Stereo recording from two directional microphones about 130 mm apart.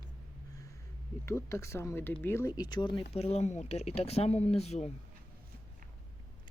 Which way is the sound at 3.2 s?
55° left (ahead or behind).